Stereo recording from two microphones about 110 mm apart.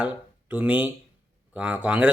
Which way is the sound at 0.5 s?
15° right (ahead or behind).